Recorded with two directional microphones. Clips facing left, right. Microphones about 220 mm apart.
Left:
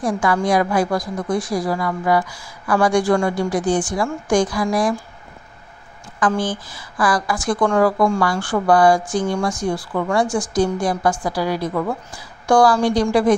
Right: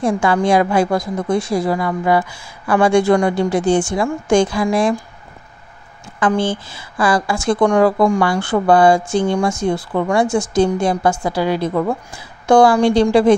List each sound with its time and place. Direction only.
0.0 s a woman's voice: 25° right (ahead or behind)
6.1 s a woman's voice: 25° right (ahead or behind)